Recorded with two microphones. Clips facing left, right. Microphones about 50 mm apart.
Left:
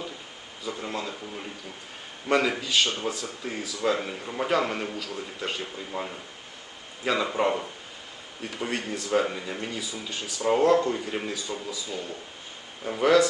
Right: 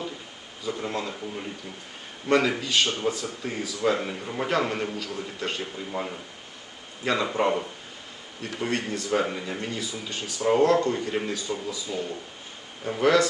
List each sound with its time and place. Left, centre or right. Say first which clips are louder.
0.6 s speech: right 2 dB; centre